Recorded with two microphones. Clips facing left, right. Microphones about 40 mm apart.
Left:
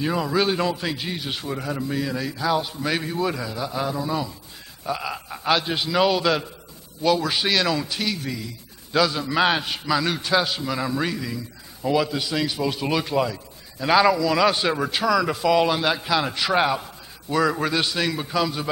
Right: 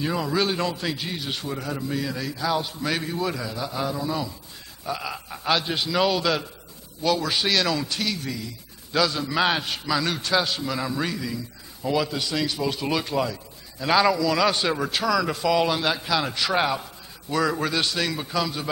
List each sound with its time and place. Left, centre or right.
0.0 s a man's voice: centre